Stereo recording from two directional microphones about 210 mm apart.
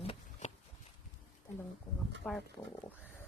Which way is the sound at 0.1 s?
35° left (ahead or behind).